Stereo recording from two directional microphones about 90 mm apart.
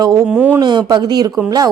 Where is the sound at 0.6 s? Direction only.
55° right (ahead or behind).